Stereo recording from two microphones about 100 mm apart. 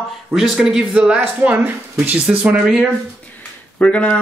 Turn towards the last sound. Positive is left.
turn(degrees=10)  # may be behind; listen again after turning